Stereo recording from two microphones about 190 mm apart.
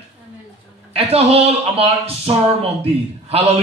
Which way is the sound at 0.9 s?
30° right (ahead or behind).